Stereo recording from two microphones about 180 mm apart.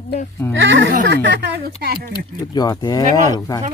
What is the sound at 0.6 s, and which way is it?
Speech, 80° right.